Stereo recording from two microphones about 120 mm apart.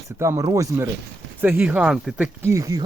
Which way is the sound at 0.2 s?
25° right (ahead or behind).